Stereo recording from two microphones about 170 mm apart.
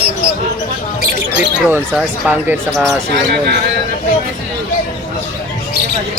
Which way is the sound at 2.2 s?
10° right (ahead or behind).